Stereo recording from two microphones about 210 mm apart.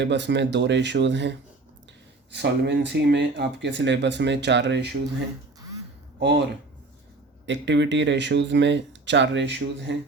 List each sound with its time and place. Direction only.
0.0 s speech: 55° right (ahead or behind)
2.3 s speech: 55° right (ahead or behind)
6.1 s speech: 55° right (ahead or behind)
7.4 s speech: 60° right (ahead or behind)